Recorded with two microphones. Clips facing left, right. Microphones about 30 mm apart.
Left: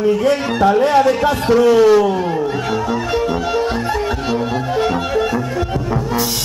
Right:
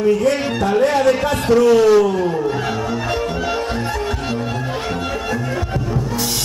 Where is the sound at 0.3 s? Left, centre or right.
Centre.